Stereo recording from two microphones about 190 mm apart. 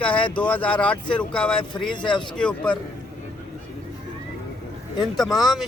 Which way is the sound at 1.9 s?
25° left (ahead or behind).